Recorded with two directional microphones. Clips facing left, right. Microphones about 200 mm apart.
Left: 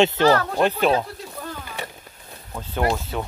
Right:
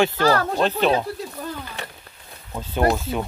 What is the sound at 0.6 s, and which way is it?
Speech, 10° left (ahead or behind).